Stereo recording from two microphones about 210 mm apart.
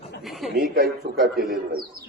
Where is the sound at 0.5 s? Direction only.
45° right (ahead or behind).